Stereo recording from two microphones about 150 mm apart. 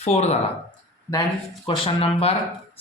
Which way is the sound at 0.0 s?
45° left (ahead or behind).